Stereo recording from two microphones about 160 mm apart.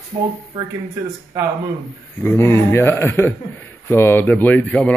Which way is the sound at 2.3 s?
15° left (ahead or behind).